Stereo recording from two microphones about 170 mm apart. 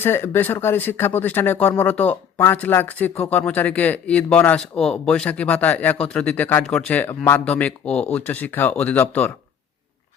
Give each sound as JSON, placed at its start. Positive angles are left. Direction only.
{"t": 0.0, "sound": "speech", "side_deg": 15}